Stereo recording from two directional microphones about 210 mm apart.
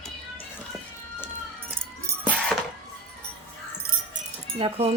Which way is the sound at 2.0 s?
5° right (ahead or behind).